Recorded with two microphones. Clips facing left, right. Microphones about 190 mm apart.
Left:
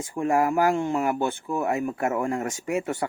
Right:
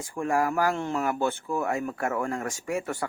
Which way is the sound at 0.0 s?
20° left (ahead or behind).